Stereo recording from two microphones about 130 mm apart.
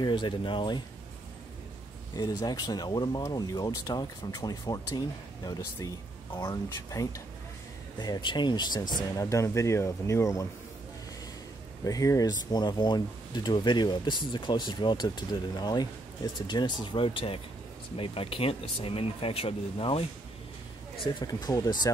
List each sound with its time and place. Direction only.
0.0 s speech: 35° left (ahead or behind)
2.1 s speech: 30° left (ahead or behind)
11.8 s speech: 25° left (ahead or behind); by 20.1 s 50° left (ahead or behind)
21.0 s speech: 35° left (ahead or behind)